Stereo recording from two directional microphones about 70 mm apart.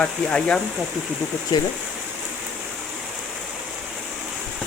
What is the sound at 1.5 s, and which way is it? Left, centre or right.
Speech, left.